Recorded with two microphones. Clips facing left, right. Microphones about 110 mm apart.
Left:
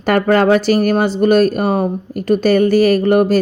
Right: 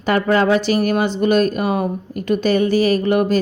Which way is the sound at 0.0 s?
50° left (ahead or behind).